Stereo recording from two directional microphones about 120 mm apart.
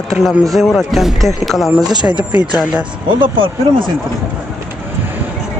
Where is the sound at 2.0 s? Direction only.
10° right (ahead or behind).